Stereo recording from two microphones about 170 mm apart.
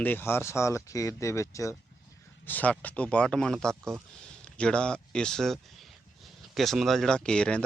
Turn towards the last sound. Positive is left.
turn(degrees=5)  # may be behind; listen again after turning